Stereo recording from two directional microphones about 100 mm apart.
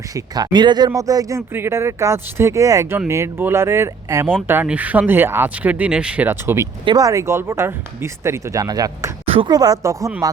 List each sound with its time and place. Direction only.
0.1 s speech: 45° right (ahead or behind)
0.9 s speech: 35° right (ahead or behind)
1.4 s speech: 25° right (ahead or behind)
6.8 s speech: 40° right (ahead or behind)
9.2 s a sound: 75° right (ahead or behind)
9.5 s speech: 40° right (ahead or behind)